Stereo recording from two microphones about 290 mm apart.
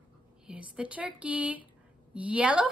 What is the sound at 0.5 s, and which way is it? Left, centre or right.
A woman's voice, centre.